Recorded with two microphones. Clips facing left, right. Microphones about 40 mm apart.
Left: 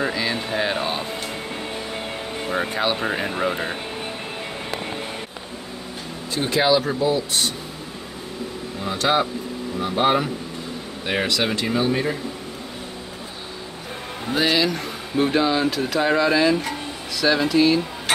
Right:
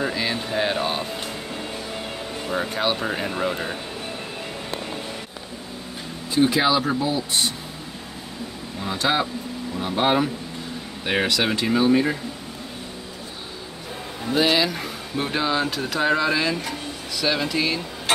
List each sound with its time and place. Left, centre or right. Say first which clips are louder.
0.1 s a sound: left 1 dB; centre
0.6 s music: right 2 dB; centre
2.4 s speech: left 2 dB; left
2.7 s speech: even; centre
3.0 s speech: left 2 dB; centre
6.4 s speech: left 1 dB; centre
8.9 s speech: left 2 dB; centre
14.3 s speech: even; centre